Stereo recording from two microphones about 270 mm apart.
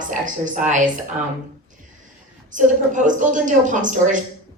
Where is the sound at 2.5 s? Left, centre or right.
Right.